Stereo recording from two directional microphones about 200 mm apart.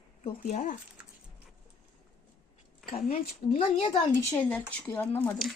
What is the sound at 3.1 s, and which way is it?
Speech, 30° left (ahead or behind).